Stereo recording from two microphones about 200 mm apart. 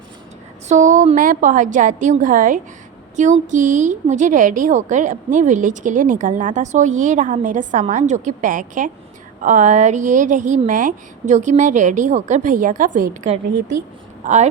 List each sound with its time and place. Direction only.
0.7 s a woman's voice: 40° right (ahead or behind)